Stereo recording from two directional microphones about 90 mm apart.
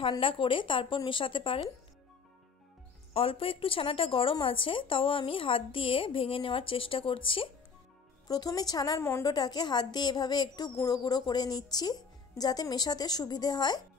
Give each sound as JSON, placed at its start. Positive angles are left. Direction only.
{"t": 0.2, "sound": "speech", "side_deg": 75}
{"t": 3.1, "sound": "speech", "side_deg": 90}
{"t": 8.3, "sound": "a woman's voice", "side_deg": 45}